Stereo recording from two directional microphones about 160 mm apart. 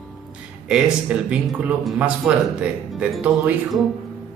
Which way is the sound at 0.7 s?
5° right (ahead or behind).